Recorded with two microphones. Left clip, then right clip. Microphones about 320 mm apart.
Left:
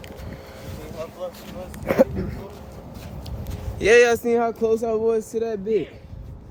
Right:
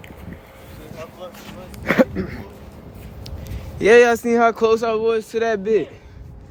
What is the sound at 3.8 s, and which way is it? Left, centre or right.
Speech, centre.